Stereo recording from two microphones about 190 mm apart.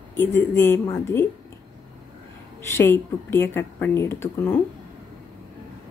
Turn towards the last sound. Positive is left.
turn(degrees=10)  # may be behind; listen again after turning